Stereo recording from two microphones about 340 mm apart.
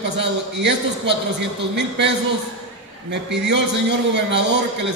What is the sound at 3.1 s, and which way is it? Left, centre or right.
A man's voice, right.